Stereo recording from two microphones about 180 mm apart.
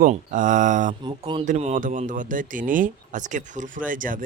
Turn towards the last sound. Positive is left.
turn(degrees=-50)  # may be behind; listen again after turning